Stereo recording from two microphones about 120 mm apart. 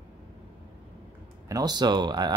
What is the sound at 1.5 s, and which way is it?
Speech, 35° right (ahead or behind).